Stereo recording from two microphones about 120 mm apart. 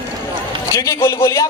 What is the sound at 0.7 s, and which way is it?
Speech, 25° left (ahead or behind).